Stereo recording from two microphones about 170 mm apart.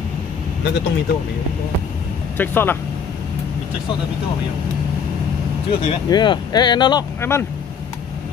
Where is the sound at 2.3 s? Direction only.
10° left (ahead or behind).